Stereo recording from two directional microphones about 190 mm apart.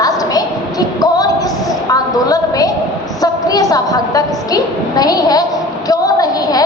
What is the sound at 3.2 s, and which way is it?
A woman's voice, 20° left (ahead or behind).